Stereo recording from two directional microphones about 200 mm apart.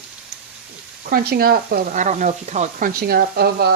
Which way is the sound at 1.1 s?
50° right (ahead or behind).